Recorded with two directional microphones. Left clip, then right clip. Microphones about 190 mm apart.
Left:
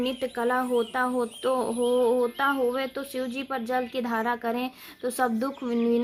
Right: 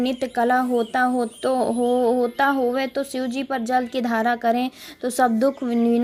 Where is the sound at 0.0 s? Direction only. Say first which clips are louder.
Right 6 dB; 20° right (ahead or behind).